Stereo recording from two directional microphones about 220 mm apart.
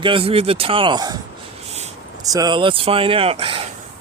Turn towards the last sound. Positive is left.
turn(degrees=-25)  # may be behind; listen again after turning